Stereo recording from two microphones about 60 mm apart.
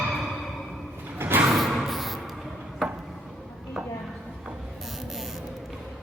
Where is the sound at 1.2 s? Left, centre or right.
Right.